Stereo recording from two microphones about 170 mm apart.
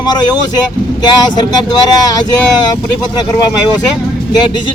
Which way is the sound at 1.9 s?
20° left (ahead or behind).